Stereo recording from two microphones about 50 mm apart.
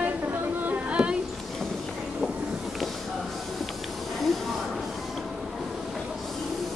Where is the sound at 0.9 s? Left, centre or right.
Centre.